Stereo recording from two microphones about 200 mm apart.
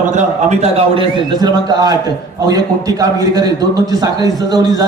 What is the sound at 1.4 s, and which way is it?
A man's voice, 20° right (ahead or behind).